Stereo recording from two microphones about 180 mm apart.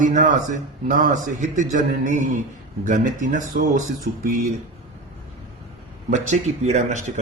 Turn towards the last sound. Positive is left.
turn(degrees=-40)  # may be behind; listen again after turning